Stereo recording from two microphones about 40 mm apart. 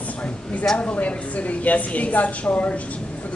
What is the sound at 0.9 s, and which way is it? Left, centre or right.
A woman's voice, left.